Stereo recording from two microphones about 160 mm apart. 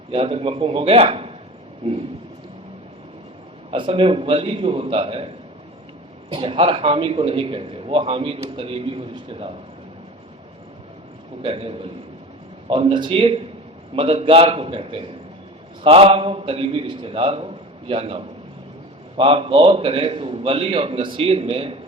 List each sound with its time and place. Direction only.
0.1 s a man's voice: 35° right (ahead or behind)
3.7 s a man's voice: 30° right (ahead or behind)
6.3 s a man's voice: 35° right (ahead or behind)
11.4 s a man's voice: 35° right (ahead or behind)